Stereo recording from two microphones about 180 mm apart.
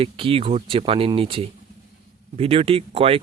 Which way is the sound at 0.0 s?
30° right (ahead or behind).